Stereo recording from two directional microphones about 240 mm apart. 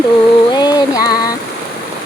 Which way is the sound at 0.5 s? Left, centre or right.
Centre.